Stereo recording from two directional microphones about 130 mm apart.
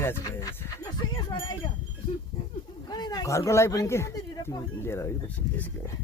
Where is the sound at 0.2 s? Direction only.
30° left (ahead or behind).